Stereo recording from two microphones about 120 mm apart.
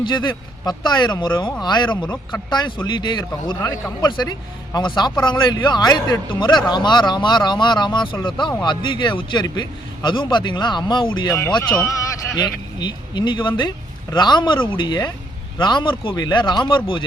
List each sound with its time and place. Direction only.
0.0 s a man's voice: 40° left (ahead or behind)
11.7 s a man's voice: 25° left (ahead or behind)
12.8 s a man's voice: 40° left (ahead or behind)